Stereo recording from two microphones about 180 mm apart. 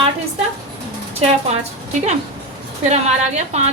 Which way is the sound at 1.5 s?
40° right (ahead or behind).